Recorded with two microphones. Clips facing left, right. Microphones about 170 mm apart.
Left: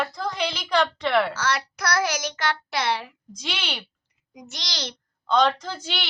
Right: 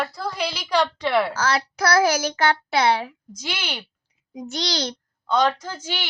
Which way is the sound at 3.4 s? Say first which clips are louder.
Right 1 dB; 10° right (ahead or behind).